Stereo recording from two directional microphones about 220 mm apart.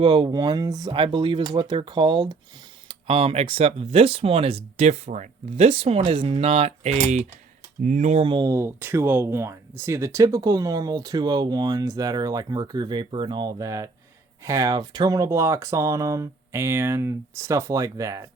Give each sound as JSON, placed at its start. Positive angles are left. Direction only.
{"t": 0.0, "sound": "speech", "side_deg": -20}